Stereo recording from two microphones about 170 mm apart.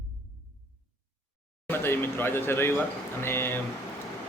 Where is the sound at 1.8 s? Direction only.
15° left (ahead or behind).